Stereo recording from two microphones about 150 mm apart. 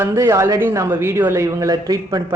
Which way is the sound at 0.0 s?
15° right (ahead or behind).